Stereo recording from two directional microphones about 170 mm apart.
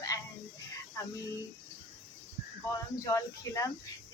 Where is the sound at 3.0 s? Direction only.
20° left (ahead or behind).